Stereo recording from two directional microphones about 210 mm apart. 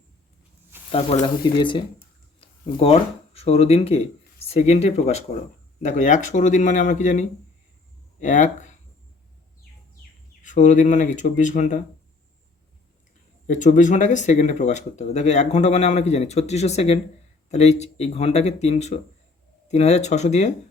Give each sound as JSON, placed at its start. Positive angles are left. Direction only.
{"t": 0.9, "sound": "speech", "side_deg": 25}
{"t": 2.8, "sound": "speech", "side_deg": 30}
{"t": 10.4, "sound": "speech", "side_deg": 35}
{"t": 13.5, "sound": "speech", "side_deg": 35}